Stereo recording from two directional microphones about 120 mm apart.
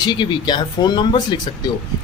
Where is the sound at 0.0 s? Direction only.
40° left (ahead or behind).